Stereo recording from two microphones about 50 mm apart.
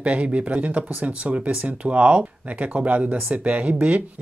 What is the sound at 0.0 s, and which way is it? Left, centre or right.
Speech, right.